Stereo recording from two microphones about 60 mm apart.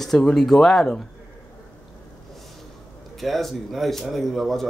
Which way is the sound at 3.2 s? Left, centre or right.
Centre.